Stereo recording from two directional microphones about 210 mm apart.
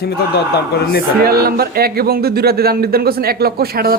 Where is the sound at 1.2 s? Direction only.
45° right (ahead or behind).